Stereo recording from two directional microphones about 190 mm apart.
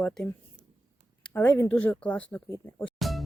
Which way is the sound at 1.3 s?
10° left (ahead or behind).